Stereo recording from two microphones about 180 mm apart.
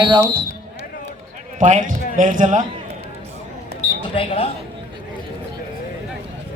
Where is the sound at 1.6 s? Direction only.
45° right (ahead or behind).